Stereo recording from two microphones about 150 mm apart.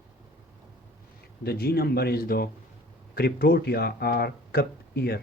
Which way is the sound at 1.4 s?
90° left.